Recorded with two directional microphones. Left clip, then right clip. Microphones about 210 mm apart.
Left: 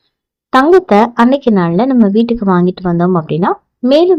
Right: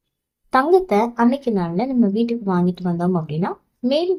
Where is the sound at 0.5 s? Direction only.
35° left (ahead or behind).